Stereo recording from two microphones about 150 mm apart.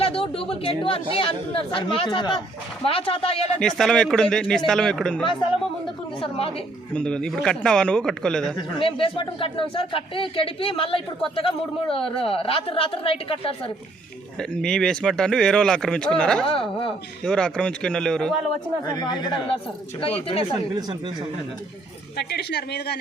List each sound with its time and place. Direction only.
0.0 s speech: 40° left (ahead or behind)
3.6 s speech: 5° left (ahead or behind)
6.1 s speech: 35° left (ahead or behind)
6.9 s speech: 5° left (ahead or behind)
8.5 s speech: 35° left (ahead or behind)
14.3 s speech: 5° left (ahead or behind)
16.5 s speech: 35° left (ahead or behind)
17.2 s speech: 5° left (ahead or behind)
18.9 s speech: 25° left (ahead or behind)
22.1 s a woman's voice: 90° left